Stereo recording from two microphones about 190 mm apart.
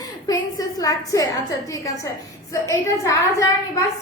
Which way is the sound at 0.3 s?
20° left (ahead or behind).